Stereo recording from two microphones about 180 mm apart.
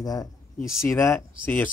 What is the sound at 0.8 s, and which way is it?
Speech, 15° left (ahead or behind).